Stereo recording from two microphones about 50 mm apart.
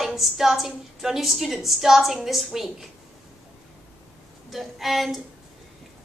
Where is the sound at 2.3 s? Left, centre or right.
Centre.